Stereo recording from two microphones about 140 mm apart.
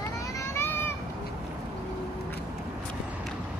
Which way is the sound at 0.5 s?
15° left (ahead or behind).